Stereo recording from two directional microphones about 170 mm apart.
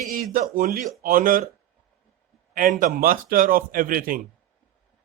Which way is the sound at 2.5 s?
55° right (ahead or behind).